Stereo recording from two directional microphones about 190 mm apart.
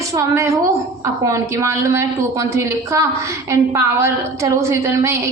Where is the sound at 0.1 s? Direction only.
15° right (ahead or behind).